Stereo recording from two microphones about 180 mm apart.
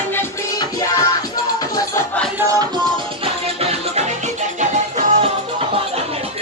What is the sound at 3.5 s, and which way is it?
Music, 35° right (ahead or behind).